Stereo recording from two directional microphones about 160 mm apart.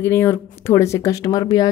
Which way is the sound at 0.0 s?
15° left (ahead or behind).